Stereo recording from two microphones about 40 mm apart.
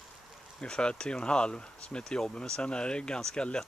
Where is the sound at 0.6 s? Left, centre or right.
Left.